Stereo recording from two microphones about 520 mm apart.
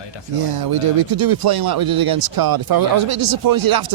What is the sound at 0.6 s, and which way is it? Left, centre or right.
Speech, right.